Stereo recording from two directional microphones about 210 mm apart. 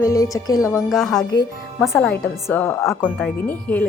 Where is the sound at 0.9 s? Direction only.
Centre (ahead or behind).